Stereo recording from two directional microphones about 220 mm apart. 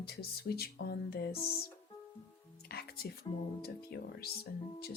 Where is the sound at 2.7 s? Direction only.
45° left (ahead or behind).